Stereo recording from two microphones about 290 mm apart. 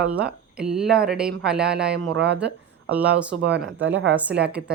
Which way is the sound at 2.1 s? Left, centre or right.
Right.